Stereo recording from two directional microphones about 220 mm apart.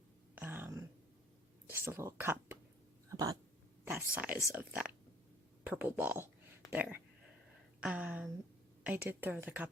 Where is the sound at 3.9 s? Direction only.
10° right (ahead or behind).